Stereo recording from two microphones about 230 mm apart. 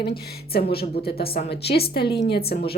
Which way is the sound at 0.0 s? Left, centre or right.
Left.